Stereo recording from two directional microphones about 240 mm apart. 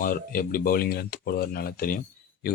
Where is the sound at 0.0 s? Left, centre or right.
Left.